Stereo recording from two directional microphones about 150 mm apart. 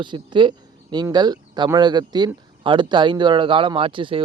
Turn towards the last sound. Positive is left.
turn(degrees=-35)  # may be behind; listen again after turning